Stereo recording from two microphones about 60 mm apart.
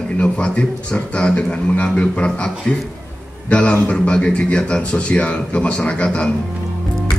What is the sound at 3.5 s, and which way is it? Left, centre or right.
A man's voice, left.